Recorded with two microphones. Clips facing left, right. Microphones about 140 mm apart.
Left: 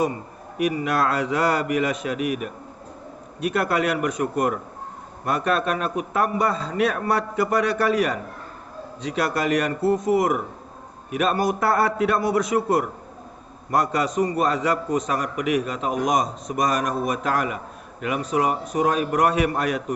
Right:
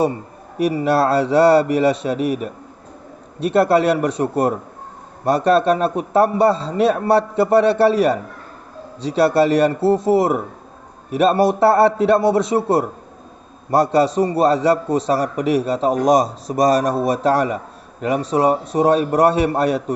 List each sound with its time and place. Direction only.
0.5 s a man's voice: 30° right (ahead or behind)